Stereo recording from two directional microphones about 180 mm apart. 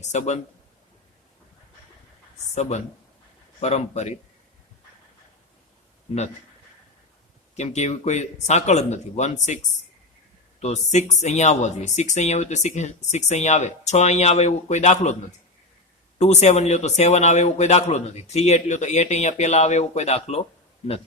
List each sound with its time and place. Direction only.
0.0 s speech: 40° left (ahead or behind)
2.6 s speech: 40° left (ahead or behind)
7.5 s speech: 40° left (ahead or behind)
10.6 s speech: 40° left (ahead or behind)